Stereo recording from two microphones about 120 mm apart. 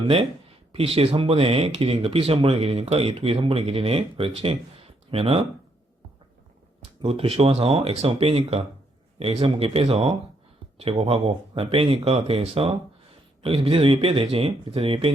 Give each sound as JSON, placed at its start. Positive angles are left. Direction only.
{"t": 0.7, "sound": "speech", "side_deg": -55}
{"t": 7.0, "sound": "speech", "side_deg": -50}